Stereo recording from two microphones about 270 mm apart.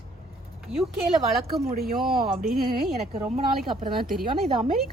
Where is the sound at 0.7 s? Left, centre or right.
Right.